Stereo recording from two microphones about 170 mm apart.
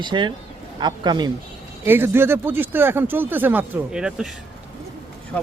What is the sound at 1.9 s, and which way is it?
Speech, 15° right (ahead or behind).